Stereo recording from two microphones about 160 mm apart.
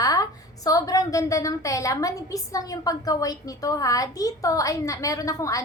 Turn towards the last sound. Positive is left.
turn(degrees=20)  # may be behind; listen again after turning